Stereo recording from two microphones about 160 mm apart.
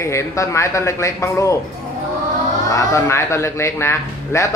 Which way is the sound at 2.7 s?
15° left (ahead or behind).